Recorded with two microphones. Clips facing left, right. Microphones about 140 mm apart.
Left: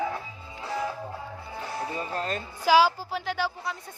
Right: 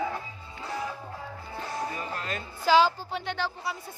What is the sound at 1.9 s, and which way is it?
Music, 35° left (ahead or behind).